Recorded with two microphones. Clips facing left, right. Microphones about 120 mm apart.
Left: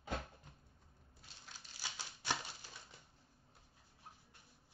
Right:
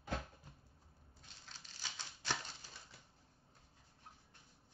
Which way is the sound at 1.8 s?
10° left (ahead or behind).